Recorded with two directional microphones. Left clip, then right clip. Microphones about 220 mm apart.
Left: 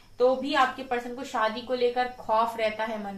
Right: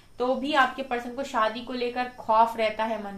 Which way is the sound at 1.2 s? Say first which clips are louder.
Right 4 dB; 45° right (ahead or behind).